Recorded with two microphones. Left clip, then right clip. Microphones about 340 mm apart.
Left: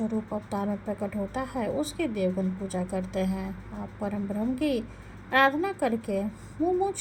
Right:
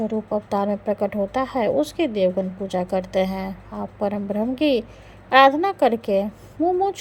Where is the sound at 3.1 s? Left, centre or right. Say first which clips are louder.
Right 9 dB; right.